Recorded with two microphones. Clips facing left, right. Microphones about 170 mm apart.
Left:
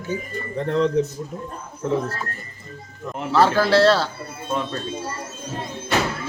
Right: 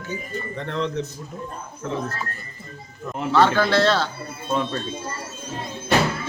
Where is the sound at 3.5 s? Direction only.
35° left (ahead or behind).